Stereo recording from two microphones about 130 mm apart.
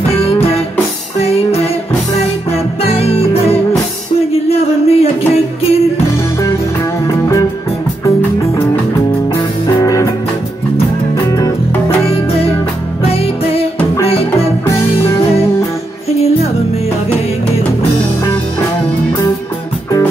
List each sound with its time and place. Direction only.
0.1 s music: 50° left (ahead or behind)
4.3 s a sound: 50° left (ahead or behind)
7.1 s music: 25° left (ahead or behind)
9.8 s music: 25° left (ahead or behind)
11.2 s music: 25° left (ahead or behind)
12.1 s music: 45° left (ahead or behind)
14.7 s music: 20° left (ahead or behind)